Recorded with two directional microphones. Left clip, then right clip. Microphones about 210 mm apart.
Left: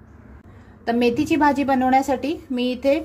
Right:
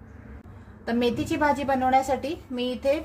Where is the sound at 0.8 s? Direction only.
35° left (ahead or behind).